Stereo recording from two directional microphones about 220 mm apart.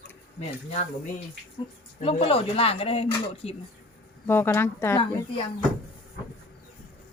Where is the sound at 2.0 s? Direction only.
30° left (ahead or behind).